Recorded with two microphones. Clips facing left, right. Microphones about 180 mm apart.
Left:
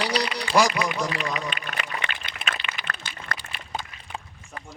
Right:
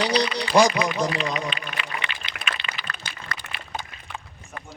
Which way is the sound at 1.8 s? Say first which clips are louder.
Left 1 dB; 45° left (ahead or behind).